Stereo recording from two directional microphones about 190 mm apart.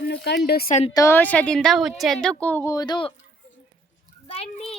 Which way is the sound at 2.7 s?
20° left (ahead or behind).